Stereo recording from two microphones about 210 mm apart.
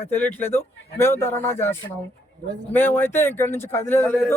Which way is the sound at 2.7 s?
10° left (ahead or behind).